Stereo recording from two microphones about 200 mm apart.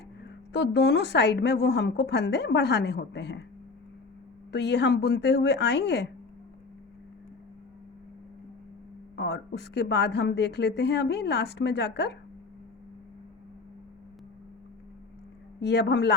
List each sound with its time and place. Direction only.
0.5 s speech: 55° left (ahead or behind)
4.5 s speech: 60° left (ahead or behind)
9.1 s speech: 55° left (ahead or behind)
15.6 s speech: 60° left (ahead or behind)